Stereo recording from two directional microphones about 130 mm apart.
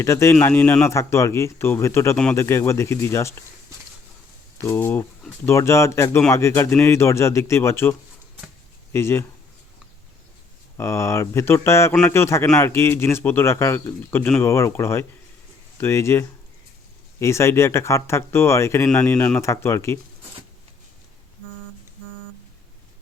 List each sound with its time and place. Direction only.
0.0 s speech: 20° left (ahead or behind)
4.5 s speech: 20° left (ahead or behind)
10.8 s speech: 20° left (ahead or behind)
19.1 s speech: 5° left (ahead or behind)
19.4 s speech: 20° left (ahead or behind)